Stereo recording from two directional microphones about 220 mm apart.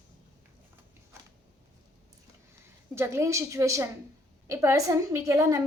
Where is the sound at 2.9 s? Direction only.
10° right (ahead or behind).